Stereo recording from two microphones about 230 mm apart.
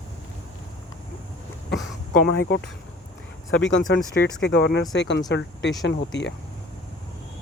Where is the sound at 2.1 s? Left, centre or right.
Left.